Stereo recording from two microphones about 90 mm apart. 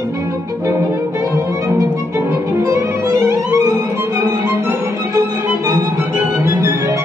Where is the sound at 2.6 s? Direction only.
30° right (ahead or behind).